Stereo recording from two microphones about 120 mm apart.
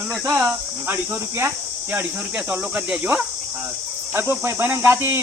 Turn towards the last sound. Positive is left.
turn(degrees=-20)  # may be behind; listen again after turning